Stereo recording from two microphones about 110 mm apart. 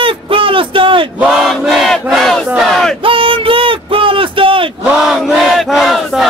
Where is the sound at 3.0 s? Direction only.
55° right (ahead or behind).